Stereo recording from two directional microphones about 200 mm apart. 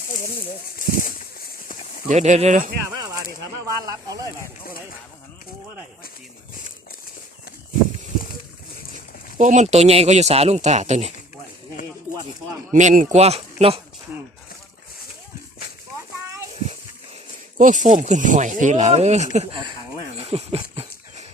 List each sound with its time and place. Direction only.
2.0 s speech: 35° right (ahead or behind)
3.7 s speech: 20° right (ahead or behind)
9.4 s speech: 35° right (ahead or behind)
12.7 s speech: 40° right (ahead or behind)
17.6 s speech: 40° right (ahead or behind)
20.1 s dog: 30° right (ahead or behind)